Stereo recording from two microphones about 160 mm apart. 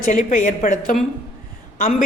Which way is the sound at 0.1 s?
55° left (ahead or behind).